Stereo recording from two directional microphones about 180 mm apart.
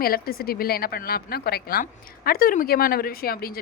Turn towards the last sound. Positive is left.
turn(degrees=55)  # may be behind; listen again after turning